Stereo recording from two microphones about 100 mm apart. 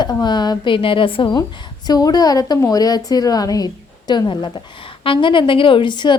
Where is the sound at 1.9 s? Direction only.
40° left (ahead or behind).